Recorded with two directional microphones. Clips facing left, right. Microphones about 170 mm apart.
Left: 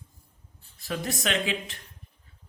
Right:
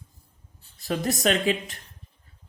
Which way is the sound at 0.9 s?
40° right (ahead or behind).